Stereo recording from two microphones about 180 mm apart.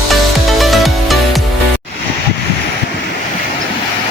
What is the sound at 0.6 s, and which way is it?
Music, centre (ahead or behind).